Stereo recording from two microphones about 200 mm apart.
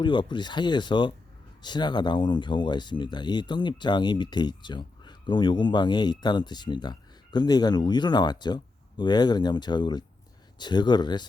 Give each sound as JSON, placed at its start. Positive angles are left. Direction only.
{"t": 0.0, "sound": "speech", "side_deg": 25}